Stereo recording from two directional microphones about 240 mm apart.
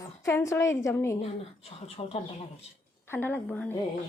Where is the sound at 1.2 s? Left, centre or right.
Left.